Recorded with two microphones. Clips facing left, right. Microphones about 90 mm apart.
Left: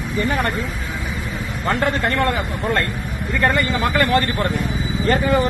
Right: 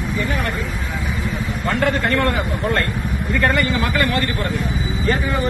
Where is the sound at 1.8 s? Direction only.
30° left (ahead or behind).